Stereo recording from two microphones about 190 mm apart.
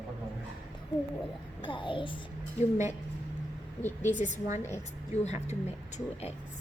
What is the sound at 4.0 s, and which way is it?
Speech, 40° left (ahead or behind).